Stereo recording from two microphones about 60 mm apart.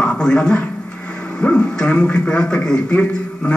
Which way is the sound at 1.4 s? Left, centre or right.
Centre.